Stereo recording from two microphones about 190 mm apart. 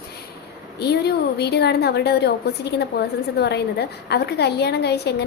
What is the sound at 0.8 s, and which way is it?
A woman's voice, 60° left (ahead or behind).